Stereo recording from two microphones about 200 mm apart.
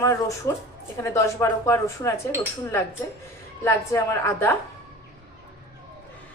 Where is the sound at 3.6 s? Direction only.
10° left (ahead or behind).